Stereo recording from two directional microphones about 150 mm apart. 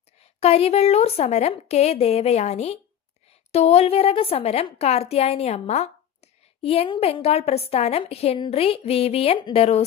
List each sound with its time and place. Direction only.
0.2 s a woman's voice: 45° left (ahead or behind)